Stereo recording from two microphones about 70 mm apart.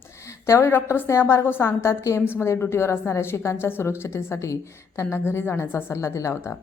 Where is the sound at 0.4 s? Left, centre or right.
Left.